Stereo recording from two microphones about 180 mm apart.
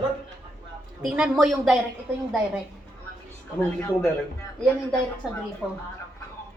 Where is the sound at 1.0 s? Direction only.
5° right (ahead or behind).